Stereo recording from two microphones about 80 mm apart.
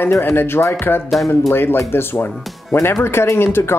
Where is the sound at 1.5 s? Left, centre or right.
Left.